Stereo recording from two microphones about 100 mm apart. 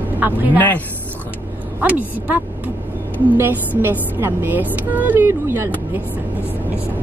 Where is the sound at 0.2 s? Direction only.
15° right (ahead or behind).